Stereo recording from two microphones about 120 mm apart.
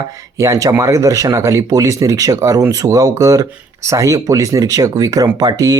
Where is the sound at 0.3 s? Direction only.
25° right (ahead or behind).